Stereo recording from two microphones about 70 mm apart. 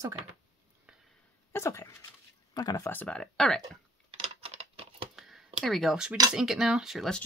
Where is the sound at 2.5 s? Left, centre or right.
Left.